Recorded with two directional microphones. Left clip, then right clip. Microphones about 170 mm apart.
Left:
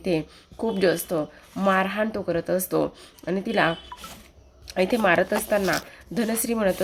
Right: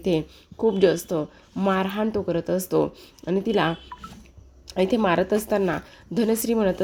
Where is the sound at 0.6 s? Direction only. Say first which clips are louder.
Right 3 dB; 30° right (ahead or behind).